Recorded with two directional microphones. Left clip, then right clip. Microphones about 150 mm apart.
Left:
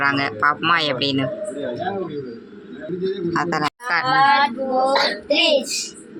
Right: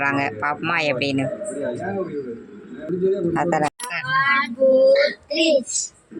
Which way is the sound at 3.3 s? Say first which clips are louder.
Right 1 dB; 10° right (ahead or behind).